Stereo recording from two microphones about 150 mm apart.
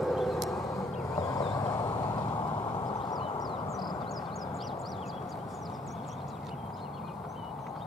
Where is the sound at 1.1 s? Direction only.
25° left (ahead or behind).